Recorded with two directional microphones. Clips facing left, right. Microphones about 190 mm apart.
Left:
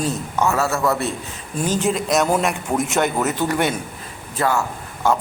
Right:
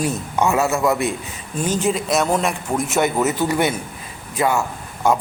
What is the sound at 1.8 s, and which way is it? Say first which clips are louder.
A man's voice: left 1 dB; centre (ahead or behind).